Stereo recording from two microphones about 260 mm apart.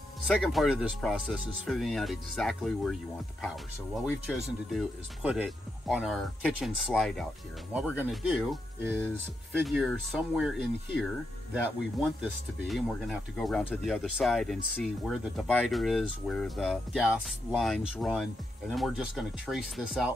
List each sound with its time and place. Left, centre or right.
0.3 s speech: centre
12.0 s speech: centre